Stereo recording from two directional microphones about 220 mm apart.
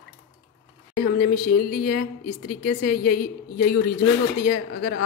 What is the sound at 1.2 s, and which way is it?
A woman's voice, 45° left (ahead or behind).